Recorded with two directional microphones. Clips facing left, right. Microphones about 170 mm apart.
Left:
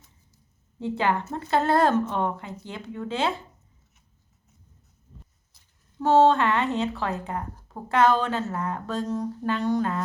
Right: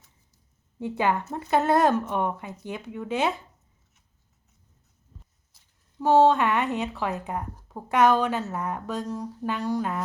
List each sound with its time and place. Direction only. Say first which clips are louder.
0.8 s a woman's voice: even; 15° right (ahead or behind)
6.0 s a woman's voice: even; 10° right (ahead or behind)